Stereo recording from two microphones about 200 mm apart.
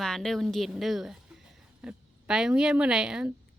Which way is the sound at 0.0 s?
Centre (ahead or behind).